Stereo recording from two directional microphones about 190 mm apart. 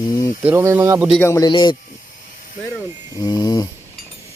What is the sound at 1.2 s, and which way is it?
Speech, 15° left (ahead or behind).